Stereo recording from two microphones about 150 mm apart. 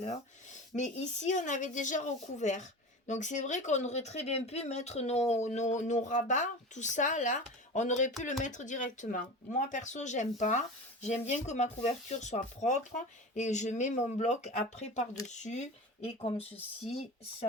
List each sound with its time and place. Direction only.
0.7 s speech: 50° left (ahead or behind)